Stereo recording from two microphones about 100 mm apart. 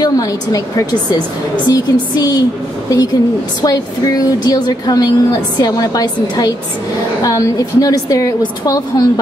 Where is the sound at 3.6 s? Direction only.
40° left (ahead or behind).